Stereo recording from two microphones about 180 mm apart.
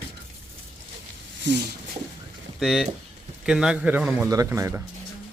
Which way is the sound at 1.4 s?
75° right (ahead or behind).